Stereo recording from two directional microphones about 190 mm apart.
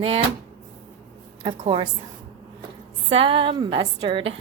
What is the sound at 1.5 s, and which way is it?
Speech, 30° right (ahead or behind).